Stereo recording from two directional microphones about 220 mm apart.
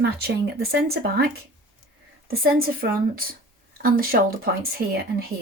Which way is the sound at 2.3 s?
45° right (ahead or behind).